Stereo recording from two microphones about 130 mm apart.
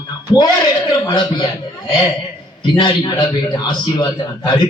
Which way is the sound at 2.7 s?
35° left (ahead or behind).